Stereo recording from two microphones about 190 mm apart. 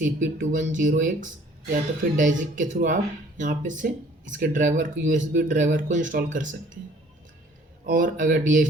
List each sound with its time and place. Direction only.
0.0 s speech: 45° right (ahead or behind)
7.9 s speech: 45° right (ahead or behind)